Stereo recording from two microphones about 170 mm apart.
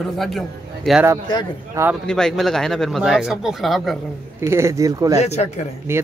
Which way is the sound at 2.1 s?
5° left (ahead or behind).